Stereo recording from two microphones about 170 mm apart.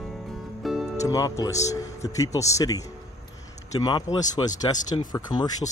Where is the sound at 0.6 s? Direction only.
Centre (ahead or behind).